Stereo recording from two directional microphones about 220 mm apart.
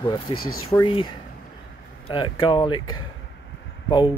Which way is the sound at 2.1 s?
20° left (ahead or behind).